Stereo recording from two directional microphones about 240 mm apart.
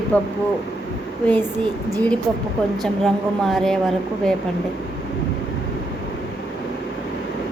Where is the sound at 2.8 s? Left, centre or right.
Centre.